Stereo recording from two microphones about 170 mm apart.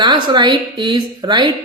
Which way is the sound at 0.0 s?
25° right (ahead or behind).